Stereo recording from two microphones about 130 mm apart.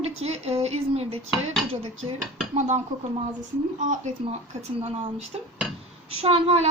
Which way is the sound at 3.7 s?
75° right (ahead or behind).